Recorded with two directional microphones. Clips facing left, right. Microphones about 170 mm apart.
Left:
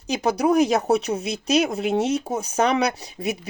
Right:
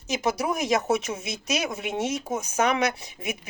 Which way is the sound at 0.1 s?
35° left (ahead or behind).